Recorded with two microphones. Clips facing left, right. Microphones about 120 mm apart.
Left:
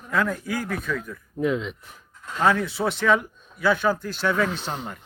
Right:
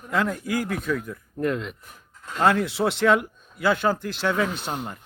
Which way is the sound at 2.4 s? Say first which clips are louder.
Right 1 dB; 50° right (ahead or behind).